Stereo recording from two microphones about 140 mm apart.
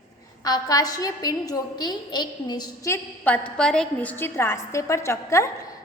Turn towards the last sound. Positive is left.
turn(degrees=20)  # may be behind; listen again after turning